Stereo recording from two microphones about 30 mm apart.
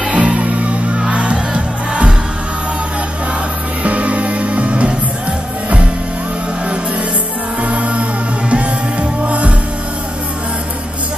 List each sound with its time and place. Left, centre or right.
0.1 s music: right
3.8 s music: right
7.6 s music: right